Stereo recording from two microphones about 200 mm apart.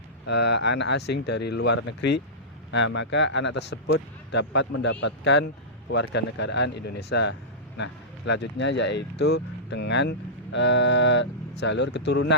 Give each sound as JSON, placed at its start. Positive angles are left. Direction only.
{"t": 0.3, "sound": "speech", "side_deg": 60}